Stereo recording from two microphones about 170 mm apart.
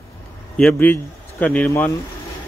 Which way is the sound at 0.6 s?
5° left (ahead or behind).